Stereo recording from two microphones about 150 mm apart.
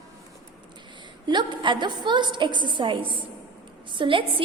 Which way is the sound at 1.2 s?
30° right (ahead or behind).